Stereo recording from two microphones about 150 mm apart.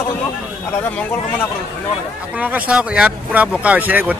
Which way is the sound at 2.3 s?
10° right (ahead or behind).